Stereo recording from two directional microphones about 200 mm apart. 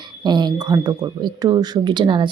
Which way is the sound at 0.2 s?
20° right (ahead or behind).